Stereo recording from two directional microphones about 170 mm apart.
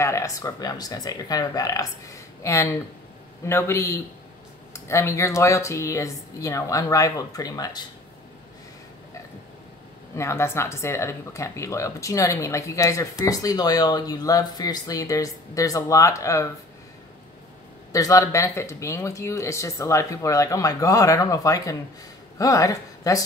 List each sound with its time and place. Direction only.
0.0 s speech: 20° left (ahead or behind)
10.1 s speech: 15° left (ahead or behind)
17.9 s speech: 20° left (ahead or behind)